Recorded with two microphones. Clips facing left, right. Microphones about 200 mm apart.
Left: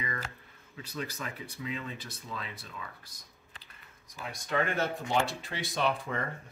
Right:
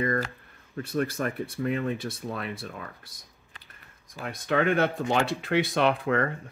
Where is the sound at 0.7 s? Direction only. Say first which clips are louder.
Right 11 dB; 60° right (ahead or behind).